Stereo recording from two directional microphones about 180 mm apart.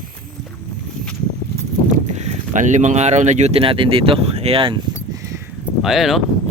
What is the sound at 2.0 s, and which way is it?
Speech, 40° right (ahead or behind).